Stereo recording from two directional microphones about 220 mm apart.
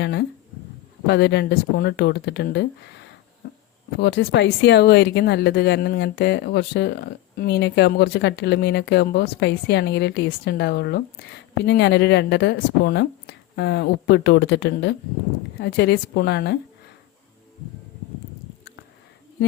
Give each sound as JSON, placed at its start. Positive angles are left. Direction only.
{"t": 0.0, "sound": "speech", "side_deg": 50}
{"t": 3.9, "sound": "speech", "side_deg": 50}